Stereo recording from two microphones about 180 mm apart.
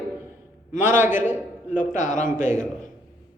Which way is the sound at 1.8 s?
45° left (ahead or behind).